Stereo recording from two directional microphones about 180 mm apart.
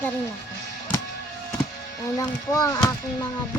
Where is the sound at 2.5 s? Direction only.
20° left (ahead or behind).